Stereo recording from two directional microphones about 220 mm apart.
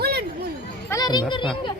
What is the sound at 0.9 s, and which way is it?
Speech, 20° left (ahead or behind).